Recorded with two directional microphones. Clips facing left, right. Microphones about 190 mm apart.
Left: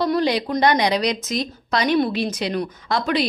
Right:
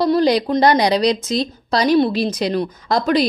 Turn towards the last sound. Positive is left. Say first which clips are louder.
# right 5 dB
turn(degrees=-40)  # may be behind; listen again after turning